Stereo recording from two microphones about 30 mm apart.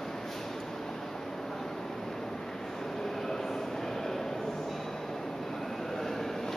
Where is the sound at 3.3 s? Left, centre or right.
Centre.